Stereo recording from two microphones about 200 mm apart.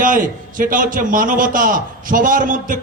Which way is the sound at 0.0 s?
40° right (ahead or behind).